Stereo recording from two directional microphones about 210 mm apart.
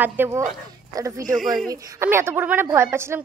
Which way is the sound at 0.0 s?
10° right (ahead or behind).